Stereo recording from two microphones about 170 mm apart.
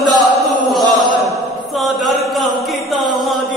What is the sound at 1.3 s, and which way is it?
Chant, centre (ahead or behind).